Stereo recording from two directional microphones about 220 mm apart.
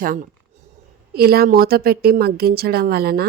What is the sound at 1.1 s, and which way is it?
A woman's voice, 45° right (ahead or behind).